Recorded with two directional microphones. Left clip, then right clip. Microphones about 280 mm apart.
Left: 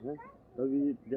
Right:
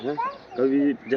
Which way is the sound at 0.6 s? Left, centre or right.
Right.